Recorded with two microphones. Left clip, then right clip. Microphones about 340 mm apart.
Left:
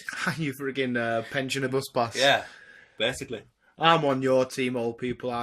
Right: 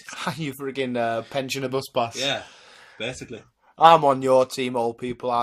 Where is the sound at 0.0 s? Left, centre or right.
Centre.